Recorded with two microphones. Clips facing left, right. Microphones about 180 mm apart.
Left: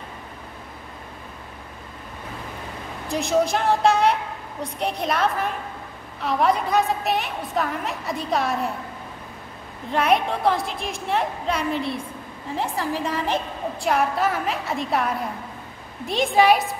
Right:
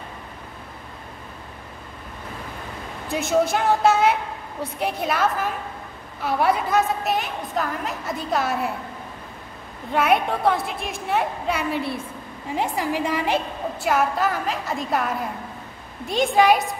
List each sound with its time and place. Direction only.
3.1 s a woman's voice: centre (ahead or behind)
9.9 s a woman's voice: centre (ahead or behind)